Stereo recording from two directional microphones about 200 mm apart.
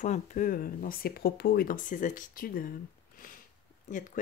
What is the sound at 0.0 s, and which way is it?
Speech, 40° left (ahead or behind).